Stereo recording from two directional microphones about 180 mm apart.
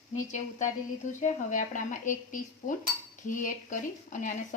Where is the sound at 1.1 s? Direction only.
45° left (ahead or behind).